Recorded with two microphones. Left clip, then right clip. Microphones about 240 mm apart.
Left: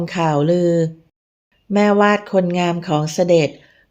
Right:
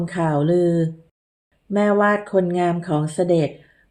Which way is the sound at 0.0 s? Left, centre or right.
Left.